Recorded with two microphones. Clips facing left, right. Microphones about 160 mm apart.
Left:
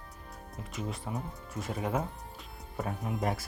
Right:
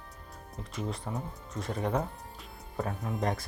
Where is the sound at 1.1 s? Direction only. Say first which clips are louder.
Even; 10° left (ahead or behind).